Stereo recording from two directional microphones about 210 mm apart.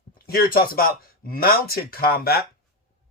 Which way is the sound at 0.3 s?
45° left (ahead or behind).